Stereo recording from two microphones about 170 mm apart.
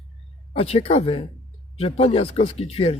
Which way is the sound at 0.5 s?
35° left (ahead or behind).